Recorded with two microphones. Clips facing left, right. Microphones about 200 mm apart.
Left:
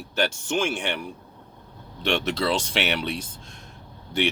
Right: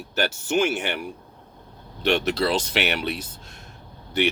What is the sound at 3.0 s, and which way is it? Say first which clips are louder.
Speech: right 1 dB; 5° right (ahead or behind).